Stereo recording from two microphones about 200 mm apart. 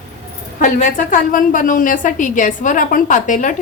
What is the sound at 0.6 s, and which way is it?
A woman's voice, 40° left (ahead or behind).